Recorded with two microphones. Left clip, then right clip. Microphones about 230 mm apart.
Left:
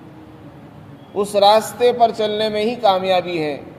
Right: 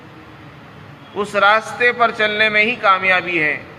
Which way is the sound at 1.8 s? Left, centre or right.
Left.